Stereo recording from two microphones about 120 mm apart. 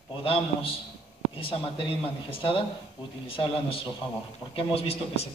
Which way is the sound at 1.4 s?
50° left (ahead or behind).